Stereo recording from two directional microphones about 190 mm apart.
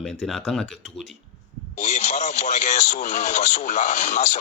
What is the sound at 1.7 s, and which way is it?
Speech, 40° left (ahead or behind).